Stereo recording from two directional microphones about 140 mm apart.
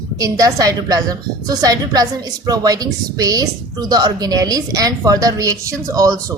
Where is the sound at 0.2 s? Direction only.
25° right (ahead or behind).